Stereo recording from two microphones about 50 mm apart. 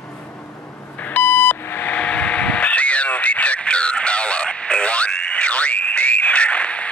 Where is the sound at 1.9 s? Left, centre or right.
Left.